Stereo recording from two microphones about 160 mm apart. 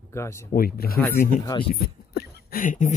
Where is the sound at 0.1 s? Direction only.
15° left (ahead or behind).